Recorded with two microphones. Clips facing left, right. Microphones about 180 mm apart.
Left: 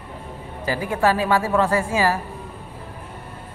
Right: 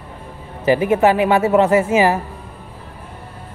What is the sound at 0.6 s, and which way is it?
A man's voice, 20° right (ahead or behind).